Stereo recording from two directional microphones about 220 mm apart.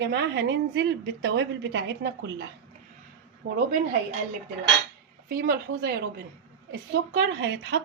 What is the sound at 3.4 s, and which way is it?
Speech, 40° right (ahead or behind).